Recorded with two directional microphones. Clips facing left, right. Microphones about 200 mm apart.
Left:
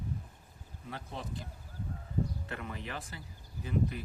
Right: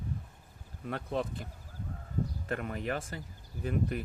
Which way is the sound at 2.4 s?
50° right (ahead or behind).